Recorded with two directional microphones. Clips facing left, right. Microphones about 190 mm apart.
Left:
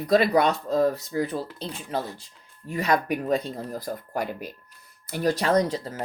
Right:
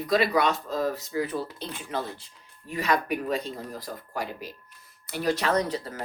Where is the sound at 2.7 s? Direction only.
45° left (ahead or behind).